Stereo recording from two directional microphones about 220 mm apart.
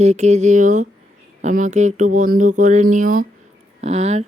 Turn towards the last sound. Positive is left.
turn(degrees=-30)  # may be behind; listen again after turning